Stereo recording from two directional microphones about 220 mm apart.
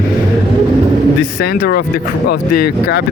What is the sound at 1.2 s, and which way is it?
Speech, 50° left (ahead or behind).